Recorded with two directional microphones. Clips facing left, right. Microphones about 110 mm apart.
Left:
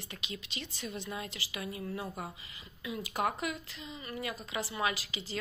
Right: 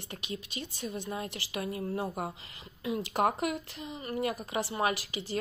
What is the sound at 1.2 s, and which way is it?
Speech, 50° right (ahead or behind).